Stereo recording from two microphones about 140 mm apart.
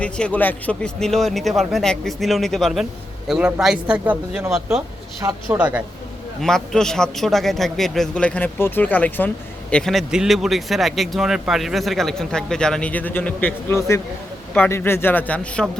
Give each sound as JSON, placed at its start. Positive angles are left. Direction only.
{"t": 0.0, "sound": "a man's voice", "side_deg": 10}
{"t": 5.5, "sound": "speech", "side_deg": -10}
{"t": 6.4, "sound": "a man's voice", "side_deg": 5}